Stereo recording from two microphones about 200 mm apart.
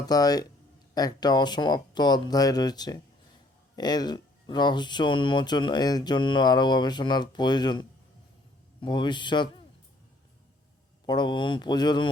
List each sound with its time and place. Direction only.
0.0 s speech: 20° left (ahead or behind)
11.0 s speech: 20° left (ahead or behind)